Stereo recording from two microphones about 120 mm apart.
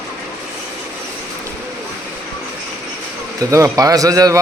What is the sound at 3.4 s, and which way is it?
Speech, 25° right (ahead or behind).